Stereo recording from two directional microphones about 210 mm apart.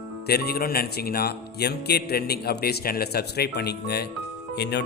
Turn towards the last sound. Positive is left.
turn(degrees=50)  # may be behind; listen again after turning